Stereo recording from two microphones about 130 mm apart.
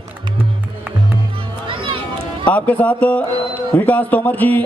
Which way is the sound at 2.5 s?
10° left (ahead or behind).